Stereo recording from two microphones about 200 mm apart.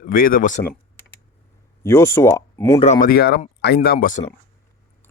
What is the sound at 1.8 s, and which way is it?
Speech, 10° left (ahead or behind).